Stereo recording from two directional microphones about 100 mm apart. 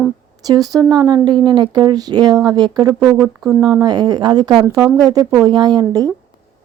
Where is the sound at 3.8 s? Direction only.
40° right (ahead or behind).